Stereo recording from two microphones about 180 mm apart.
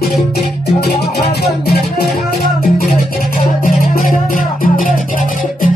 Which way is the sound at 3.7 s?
50° left (ahead or behind).